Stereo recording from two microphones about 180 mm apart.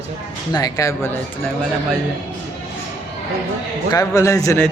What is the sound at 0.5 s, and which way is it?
Speech, 20° left (ahead or behind).